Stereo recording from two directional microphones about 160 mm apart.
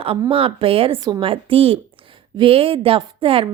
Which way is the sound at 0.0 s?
35° right (ahead or behind).